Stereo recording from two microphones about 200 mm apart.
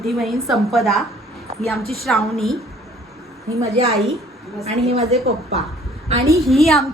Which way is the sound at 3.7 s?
30° right (ahead or behind).